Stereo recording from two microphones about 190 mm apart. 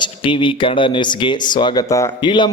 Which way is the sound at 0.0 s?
25° left (ahead or behind).